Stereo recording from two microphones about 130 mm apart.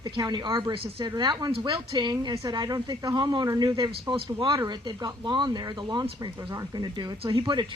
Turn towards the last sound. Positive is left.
turn(degrees=-40)  # may be behind; listen again after turning